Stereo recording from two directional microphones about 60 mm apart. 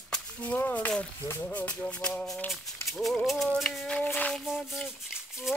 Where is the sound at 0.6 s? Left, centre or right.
Left; by 2.5 s centre.